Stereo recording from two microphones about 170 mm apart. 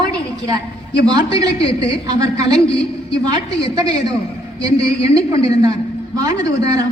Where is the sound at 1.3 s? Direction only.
20° right (ahead or behind).